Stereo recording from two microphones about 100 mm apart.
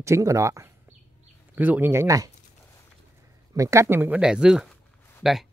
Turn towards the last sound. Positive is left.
turn(degrees=-5)  # may be behind; listen again after turning